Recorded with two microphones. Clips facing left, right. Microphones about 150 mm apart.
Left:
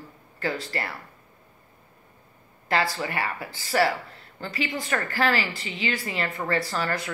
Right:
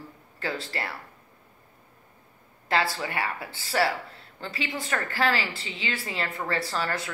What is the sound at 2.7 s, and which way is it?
Speech, centre (ahead or behind).